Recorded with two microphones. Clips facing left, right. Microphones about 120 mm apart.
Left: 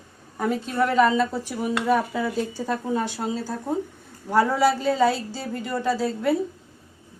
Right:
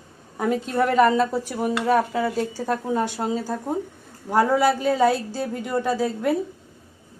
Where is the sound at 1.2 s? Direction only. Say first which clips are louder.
Right 2 dB; 45° right (ahead or behind).